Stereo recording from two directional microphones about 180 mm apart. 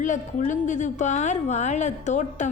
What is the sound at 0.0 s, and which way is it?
A woman's voice, 45° left (ahead or behind).